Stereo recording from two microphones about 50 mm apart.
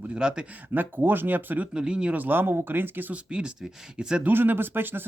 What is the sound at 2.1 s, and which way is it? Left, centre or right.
Speech, right.